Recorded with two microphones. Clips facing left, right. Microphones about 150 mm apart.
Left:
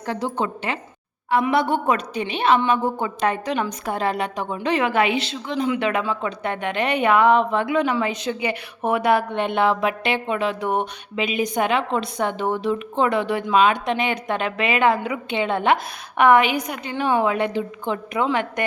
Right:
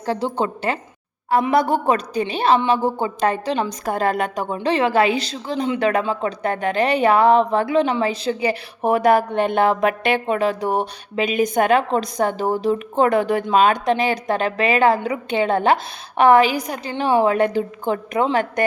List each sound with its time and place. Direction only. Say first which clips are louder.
0.0 s a woman's voice: right 3 dB; 30° right (ahead or behind)
4.5 s a woman's voice: right 3 dB; 30° right (ahead or behind)